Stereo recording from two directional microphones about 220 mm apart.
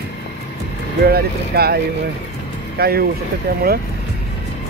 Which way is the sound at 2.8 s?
45° right (ahead or behind).